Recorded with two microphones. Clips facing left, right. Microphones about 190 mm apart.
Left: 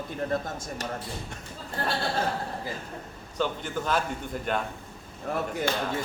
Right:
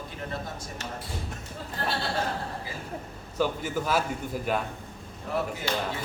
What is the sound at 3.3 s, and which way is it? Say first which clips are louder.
A man's voice: right 2 dB; 5° right (ahead or behind).